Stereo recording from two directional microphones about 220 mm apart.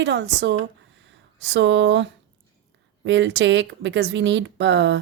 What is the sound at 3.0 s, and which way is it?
Speech, 55° right (ahead or behind).